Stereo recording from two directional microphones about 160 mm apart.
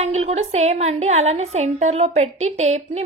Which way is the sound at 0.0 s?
45° right (ahead or behind).